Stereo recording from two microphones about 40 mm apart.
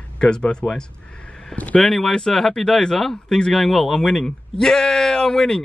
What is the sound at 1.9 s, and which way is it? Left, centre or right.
Speech, centre.